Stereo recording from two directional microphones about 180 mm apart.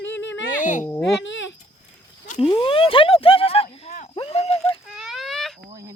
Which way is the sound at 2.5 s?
30° left (ahead or behind).